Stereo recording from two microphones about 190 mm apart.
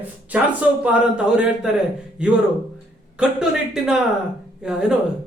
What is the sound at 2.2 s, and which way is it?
Speech, 5° right (ahead or behind).